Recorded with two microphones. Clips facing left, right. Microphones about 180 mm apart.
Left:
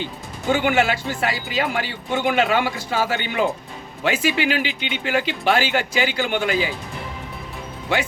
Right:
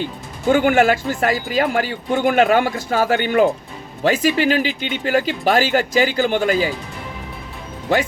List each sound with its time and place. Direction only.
0.5 s speech: 50° right (ahead or behind)